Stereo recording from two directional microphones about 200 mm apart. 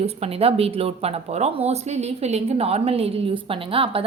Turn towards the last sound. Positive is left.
turn(degrees=-25)  # may be behind; listen again after turning